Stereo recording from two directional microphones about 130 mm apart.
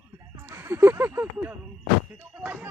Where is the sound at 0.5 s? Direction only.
20° right (ahead or behind).